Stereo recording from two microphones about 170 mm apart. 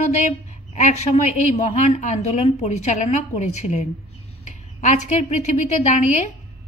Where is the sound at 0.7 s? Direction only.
45° left (ahead or behind).